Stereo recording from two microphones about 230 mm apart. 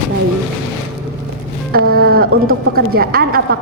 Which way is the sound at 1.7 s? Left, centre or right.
Right.